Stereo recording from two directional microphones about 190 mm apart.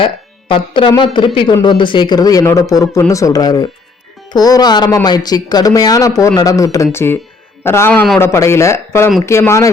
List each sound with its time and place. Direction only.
0.0 s speech: 25° left (ahead or behind)